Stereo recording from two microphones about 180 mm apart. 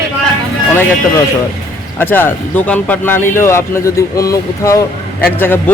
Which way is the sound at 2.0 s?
10° left (ahead or behind).